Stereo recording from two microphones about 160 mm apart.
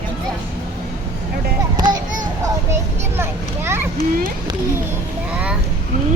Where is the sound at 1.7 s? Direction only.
25° right (ahead or behind).